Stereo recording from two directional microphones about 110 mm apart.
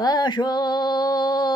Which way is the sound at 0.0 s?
40° left (ahead or behind).